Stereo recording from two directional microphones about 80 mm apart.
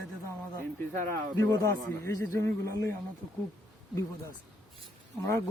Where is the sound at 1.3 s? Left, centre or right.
Left.